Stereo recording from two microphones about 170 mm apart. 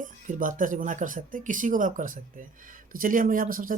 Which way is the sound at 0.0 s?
50° right (ahead or behind).